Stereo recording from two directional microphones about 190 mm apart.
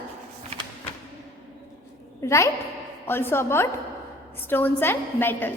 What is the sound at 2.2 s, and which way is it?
A woman's voice, 15° left (ahead or behind).